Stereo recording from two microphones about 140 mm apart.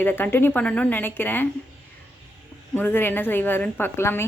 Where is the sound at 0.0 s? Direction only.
15° left (ahead or behind).